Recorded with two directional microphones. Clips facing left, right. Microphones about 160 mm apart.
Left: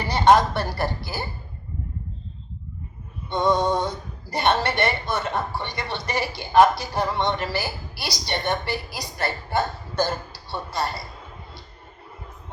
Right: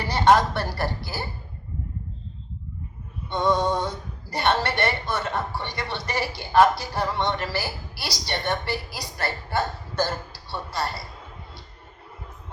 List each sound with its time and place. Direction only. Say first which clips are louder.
0.0 s a man's voice: left 2 dB; 20° left (ahead or behind)
3.2 s speech: left 1 dB; 15° left (ahead or behind)